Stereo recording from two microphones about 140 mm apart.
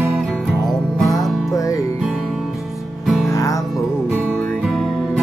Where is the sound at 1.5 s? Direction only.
25° left (ahead or behind).